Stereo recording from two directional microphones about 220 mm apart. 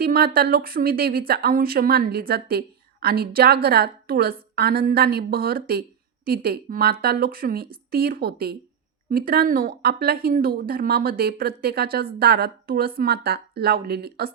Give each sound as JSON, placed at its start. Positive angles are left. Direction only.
{"t": 0.0, "sound": "a woman's voice", "side_deg": -45}